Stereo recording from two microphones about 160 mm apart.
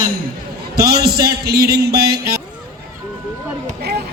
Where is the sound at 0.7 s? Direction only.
80° right.